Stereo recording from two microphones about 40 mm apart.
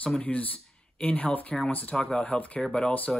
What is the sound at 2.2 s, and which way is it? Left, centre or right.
Speech, left.